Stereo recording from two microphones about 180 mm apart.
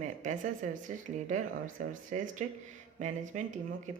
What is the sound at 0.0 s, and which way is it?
Speech, 45° right (ahead or behind).